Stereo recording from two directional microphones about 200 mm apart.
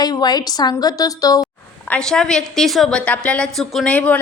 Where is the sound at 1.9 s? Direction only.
5° left (ahead or behind).